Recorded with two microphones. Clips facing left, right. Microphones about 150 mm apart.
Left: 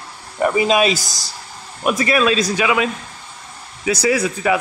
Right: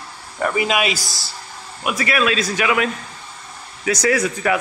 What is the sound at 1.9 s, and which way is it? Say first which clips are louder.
Speech: left 2 dB; 30° left (ahead or behind).